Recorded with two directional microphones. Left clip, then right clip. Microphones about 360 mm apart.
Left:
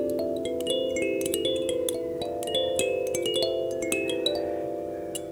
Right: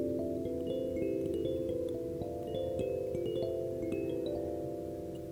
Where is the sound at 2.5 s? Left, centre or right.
Centre.